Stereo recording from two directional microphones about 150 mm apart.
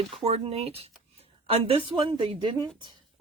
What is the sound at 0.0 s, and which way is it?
A woman's voice, 40° right (ahead or behind).